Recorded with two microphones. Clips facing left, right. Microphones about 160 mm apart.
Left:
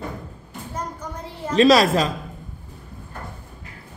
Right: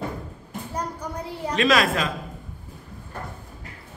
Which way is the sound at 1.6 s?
35° left (ahead or behind).